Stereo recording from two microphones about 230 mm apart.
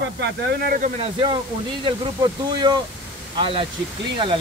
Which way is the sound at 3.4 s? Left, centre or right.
Right.